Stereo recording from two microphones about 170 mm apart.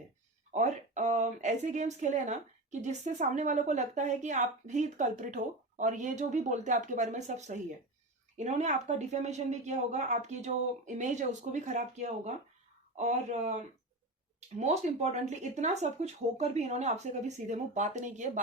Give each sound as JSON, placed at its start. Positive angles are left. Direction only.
{"t": 0.5, "sound": "a woman's voice", "side_deg": -45}